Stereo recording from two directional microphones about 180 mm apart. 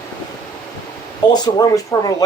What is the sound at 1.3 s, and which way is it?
Speech, 20° left (ahead or behind).